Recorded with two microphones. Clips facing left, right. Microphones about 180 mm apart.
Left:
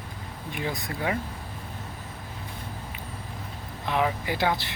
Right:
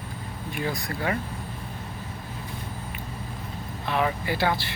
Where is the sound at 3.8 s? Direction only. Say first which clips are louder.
Even; 15° left (ahead or behind).